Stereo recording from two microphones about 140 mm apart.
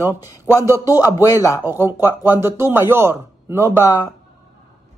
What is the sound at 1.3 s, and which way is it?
Speech, 20° left (ahead or behind).